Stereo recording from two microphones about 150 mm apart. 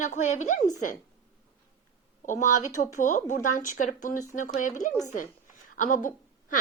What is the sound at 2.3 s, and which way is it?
A woman's voice, 60° left (ahead or behind).